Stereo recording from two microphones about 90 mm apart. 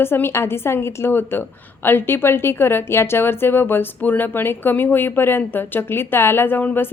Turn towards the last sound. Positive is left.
turn(degrees=20)  # may be behind; listen again after turning